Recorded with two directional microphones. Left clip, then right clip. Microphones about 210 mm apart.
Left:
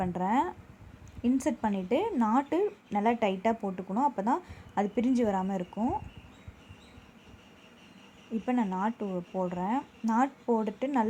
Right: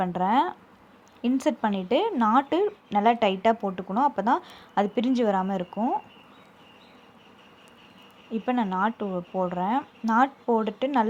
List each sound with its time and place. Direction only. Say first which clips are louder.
0.0 s speech: right 6 dB; 15° right (ahead or behind)
8.3 s speech: right 5 dB; 15° right (ahead or behind)